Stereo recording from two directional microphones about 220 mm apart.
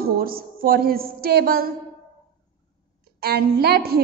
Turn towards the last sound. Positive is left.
turn(degrees=-45)  # may be behind; listen again after turning